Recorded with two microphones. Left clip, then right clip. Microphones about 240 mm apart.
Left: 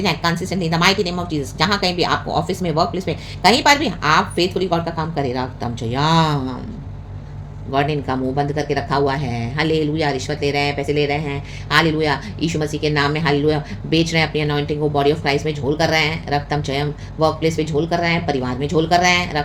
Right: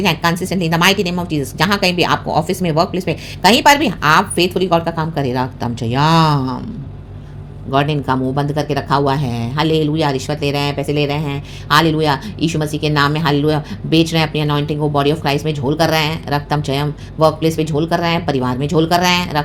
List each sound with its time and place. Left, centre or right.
0.0 s speech: right
7.7 s speech: right